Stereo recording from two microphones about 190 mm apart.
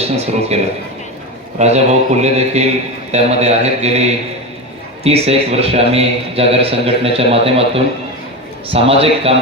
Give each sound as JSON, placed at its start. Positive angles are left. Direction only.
{"t": 0.0, "sound": "a man's voice", "side_deg": -35}
{"t": 5.0, "sound": "a man's voice", "side_deg": -30}
{"t": 8.7, "sound": "a man's voice", "side_deg": -30}